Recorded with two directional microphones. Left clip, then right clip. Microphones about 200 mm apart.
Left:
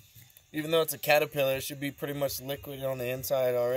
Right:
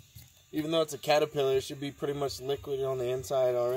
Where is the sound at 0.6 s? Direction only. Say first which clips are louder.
Left 2 dB; 45° left (ahead or behind).